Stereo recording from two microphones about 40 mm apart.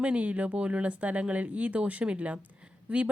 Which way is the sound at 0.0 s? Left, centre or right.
Right.